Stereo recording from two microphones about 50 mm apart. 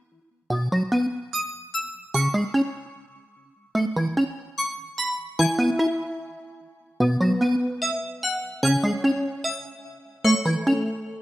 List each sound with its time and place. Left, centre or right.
0.4 s music: centre
3.7 s music: centre
6.9 s music: centre